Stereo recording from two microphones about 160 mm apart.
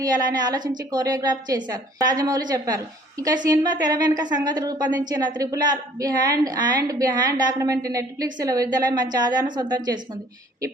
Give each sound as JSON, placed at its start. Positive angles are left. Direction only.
{"t": 0.0, "sound": "a woman's voice", "side_deg": -25}